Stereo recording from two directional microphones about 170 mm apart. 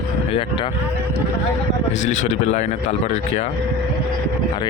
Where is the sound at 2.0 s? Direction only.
45° left (ahead or behind).